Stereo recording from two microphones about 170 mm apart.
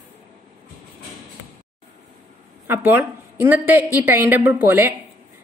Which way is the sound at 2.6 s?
10° right (ahead or behind).